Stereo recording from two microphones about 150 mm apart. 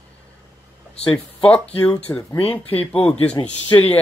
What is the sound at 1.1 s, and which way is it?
Speech, 5° left (ahead or behind).